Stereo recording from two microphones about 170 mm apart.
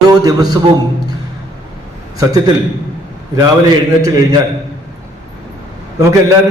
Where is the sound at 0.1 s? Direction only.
20° right (ahead or behind).